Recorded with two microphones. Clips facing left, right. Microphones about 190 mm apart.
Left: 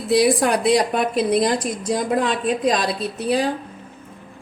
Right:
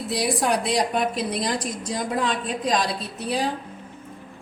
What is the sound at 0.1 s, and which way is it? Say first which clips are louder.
A woman's voice: left 7 dB; 65° left (ahead or behind).